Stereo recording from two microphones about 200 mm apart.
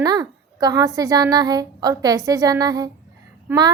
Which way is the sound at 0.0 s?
20° right (ahead or behind).